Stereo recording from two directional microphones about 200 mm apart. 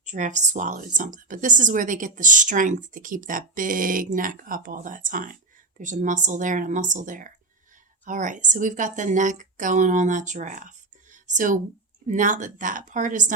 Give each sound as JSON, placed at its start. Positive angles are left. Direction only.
{"t": 0.0, "sound": "speech", "side_deg": -40}